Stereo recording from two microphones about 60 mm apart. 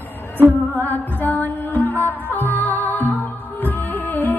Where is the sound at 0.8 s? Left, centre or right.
Left.